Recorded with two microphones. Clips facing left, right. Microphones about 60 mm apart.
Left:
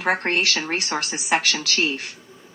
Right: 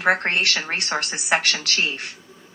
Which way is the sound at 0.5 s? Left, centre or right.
Right.